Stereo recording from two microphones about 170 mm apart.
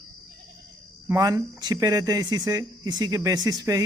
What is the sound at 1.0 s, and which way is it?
Speech, 20° right (ahead or behind).